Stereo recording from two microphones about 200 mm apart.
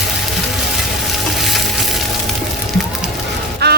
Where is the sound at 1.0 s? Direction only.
Centre (ahead or behind).